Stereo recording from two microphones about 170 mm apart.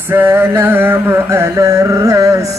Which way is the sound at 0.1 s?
15° right (ahead or behind).